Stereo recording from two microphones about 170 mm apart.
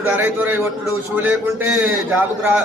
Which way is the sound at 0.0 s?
10° right (ahead or behind).